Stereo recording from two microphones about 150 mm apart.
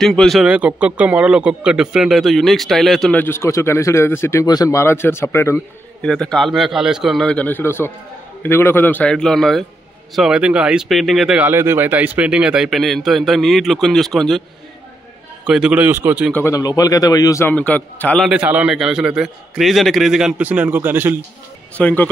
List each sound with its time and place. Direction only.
0.0 s speech: 5° left (ahead or behind)
6.0 s a man's voice: 5° left (ahead or behind)
15.4 s a man's voice: 5° right (ahead or behind)
16.3 s a man's voice: 20° left (ahead or behind)
18.3 s speech: 10° right (ahead or behind)
21.7 s a man's voice: 10° left (ahead or behind)